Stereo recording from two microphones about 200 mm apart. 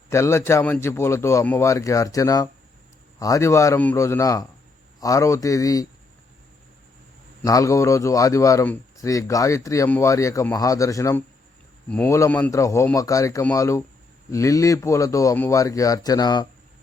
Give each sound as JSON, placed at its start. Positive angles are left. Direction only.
{"t": 0.1, "sound": "a man's voice", "side_deg": 15}
{"t": 7.4, "sound": "a man's voice", "side_deg": 15}